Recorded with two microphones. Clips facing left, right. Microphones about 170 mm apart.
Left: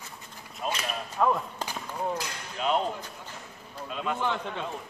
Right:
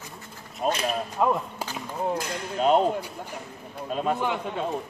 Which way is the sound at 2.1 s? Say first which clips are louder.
Right 7 dB; 40° right (ahead or behind).